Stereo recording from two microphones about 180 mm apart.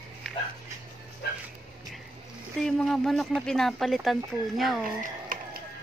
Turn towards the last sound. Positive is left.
turn(degrees=-45)  # may be behind; listen again after turning